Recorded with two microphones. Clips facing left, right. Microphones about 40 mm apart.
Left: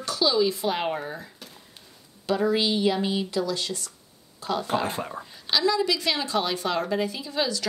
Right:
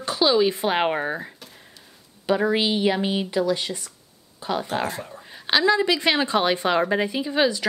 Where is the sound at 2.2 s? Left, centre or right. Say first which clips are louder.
Right 2 dB; right.